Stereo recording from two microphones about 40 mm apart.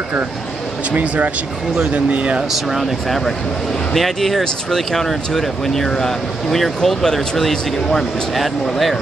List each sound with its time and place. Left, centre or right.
0.9 s speech: right
1.8 s speech: right
2.8 s speech: centre